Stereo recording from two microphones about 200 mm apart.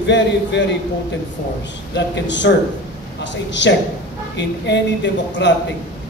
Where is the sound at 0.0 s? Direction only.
60° left (ahead or behind).